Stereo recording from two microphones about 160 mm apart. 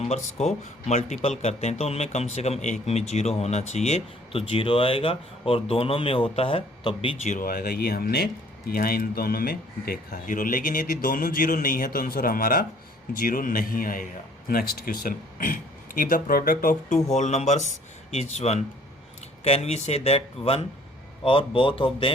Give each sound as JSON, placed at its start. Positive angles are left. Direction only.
{"t": 0.0, "sound": "speech", "side_deg": 45}
{"t": 7.2, "sound": "speech", "side_deg": 55}
{"t": 17.2, "sound": "speech", "side_deg": 45}